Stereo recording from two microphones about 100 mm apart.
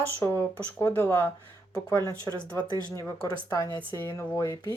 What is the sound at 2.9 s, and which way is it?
Speech, 30° left (ahead or behind).